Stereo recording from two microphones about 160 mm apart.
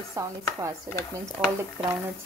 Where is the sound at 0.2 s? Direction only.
20° right (ahead or behind).